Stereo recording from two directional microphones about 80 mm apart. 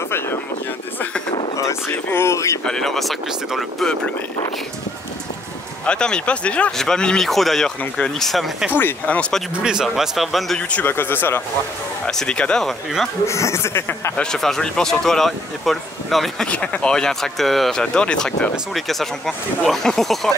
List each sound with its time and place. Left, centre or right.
1.6 s speech: left
2.6 s speech: centre
5.9 s speech: centre
8.7 s speech: left
9.6 s speech: centre
10.7 s speech: left
12.1 s speech: centre
12.6 s speech: centre
13.3 s speech: left
14.1 s speech: centre
16.4 s speech: centre